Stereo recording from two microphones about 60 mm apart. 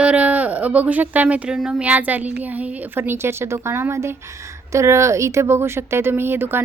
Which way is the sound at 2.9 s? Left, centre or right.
Right.